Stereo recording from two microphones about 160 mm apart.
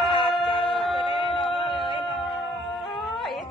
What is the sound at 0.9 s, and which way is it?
Music, 30° left (ahead or behind).